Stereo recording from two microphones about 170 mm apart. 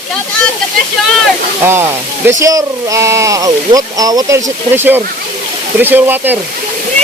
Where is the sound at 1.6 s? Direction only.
15° right (ahead or behind).